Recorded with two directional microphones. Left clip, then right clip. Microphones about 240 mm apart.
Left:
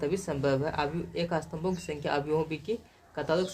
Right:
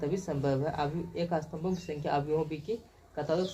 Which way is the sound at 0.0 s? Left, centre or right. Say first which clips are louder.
Left 3 dB; left.